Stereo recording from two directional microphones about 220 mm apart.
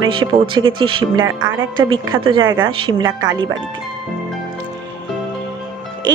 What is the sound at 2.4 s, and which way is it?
Speech, 65° right (ahead or behind).